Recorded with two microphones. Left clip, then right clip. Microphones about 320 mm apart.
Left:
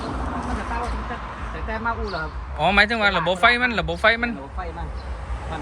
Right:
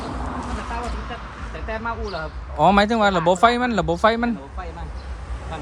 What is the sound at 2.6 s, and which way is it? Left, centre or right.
Speech, centre.